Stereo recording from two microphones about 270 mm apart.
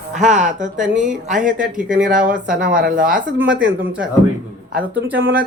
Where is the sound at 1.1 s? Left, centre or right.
Right.